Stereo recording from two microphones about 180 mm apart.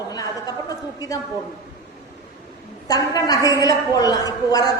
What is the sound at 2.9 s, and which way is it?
A woman's voice, 20° left (ahead or behind).